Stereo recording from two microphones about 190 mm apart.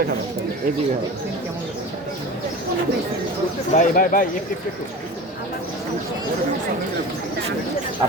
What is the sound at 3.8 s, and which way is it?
Speech, 45° left (ahead or behind).